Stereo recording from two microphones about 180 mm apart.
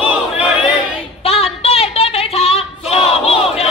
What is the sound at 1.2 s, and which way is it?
Choir, 35° left (ahead or behind).